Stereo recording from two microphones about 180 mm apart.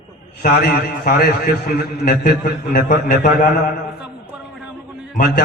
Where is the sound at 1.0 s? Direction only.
55° left (ahead or behind).